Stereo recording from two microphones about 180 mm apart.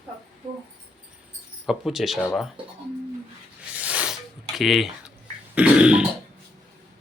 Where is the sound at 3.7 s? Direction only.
5° right (ahead or behind).